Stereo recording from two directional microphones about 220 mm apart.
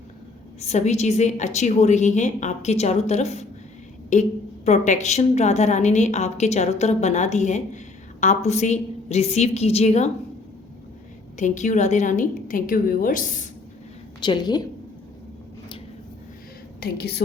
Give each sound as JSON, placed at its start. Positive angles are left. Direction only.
{"t": 0.6, "sound": "a woman's voice", "side_deg": 30}
{"t": 11.3, "sound": "a woman's voice", "side_deg": 35}
{"t": 14.2, "sound": "a woman's voice", "side_deg": 20}
{"t": 16.8, "sound": "a woman's voice", "side_deg": 45}